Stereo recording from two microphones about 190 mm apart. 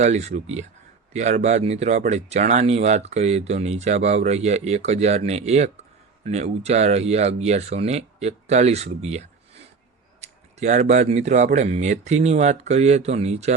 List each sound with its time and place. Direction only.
0.0 s speech: 35° right (ahead or behind)